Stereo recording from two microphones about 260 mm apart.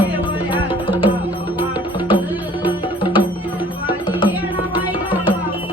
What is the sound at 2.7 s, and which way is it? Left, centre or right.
Music, centre.